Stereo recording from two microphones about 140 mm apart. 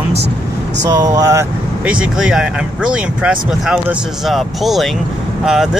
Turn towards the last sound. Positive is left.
turn(degrees=-5)  # may be behind; listen again after turning